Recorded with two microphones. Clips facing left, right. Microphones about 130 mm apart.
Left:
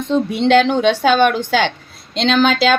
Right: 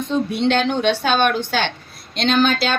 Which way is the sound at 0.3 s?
90° left.